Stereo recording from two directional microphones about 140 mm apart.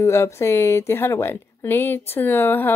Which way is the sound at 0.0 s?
20° left (ahead or behind).